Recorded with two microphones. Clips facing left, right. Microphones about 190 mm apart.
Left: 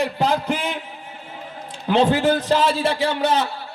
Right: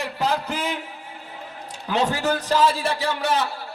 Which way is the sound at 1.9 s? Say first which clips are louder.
Left 6 dB; 25° left (ahead or behind).